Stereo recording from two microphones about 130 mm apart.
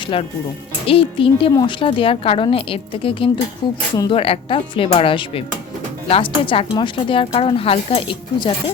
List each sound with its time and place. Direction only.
0.1 s a woman's voice: 45° left (ahead or behind)